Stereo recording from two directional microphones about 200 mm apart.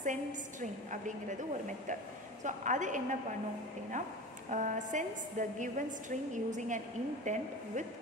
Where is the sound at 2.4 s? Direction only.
40° right (ahead or behind).